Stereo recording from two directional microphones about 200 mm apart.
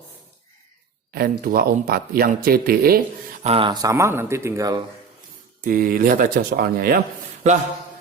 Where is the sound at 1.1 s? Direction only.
50° right (ahead or behind).